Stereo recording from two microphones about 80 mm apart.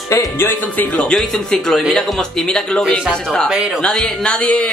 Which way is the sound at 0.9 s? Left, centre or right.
Centre.